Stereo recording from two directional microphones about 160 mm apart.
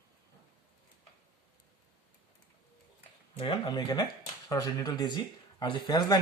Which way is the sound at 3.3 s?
30° left (ahead or behind).